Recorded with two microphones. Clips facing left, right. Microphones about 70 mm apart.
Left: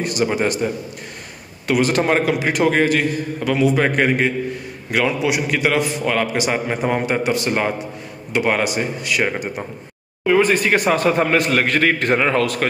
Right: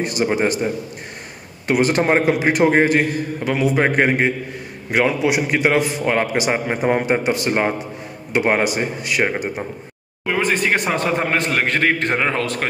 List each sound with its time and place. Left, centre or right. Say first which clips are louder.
0.0 s a man's voice: even; right
1.7 s a man's voice: right 1 dB; right
10.2 s a man's voice: left 4 dB; centre